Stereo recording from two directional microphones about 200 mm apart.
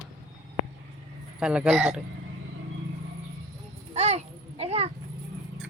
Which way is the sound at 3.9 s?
35° right (ahead or behind).